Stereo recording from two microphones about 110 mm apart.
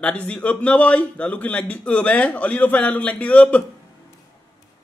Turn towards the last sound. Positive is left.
turn(degrees=15)  # may be behind; listen again after turning